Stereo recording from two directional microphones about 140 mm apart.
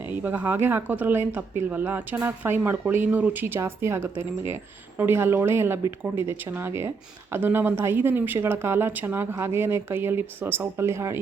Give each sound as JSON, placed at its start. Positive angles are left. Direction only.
{"t": 0.1, "sound": "speech", "side_deg": -10}